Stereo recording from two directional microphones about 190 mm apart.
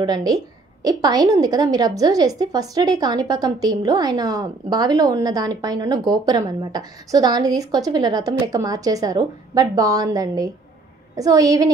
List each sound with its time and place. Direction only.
0.0 s a woman's voice: 20° right (ahead or behind)